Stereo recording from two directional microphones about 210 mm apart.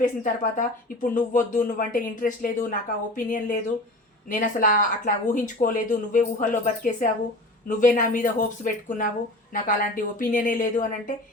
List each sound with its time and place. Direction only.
0.0 s speech: 40° left (ahead or behind)